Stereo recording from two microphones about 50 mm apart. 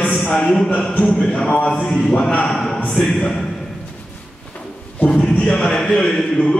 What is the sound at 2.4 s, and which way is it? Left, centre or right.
Speech, centre.